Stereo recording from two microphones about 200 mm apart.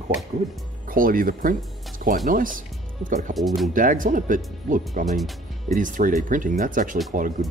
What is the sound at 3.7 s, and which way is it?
Speech, 40° right (ahead or behind).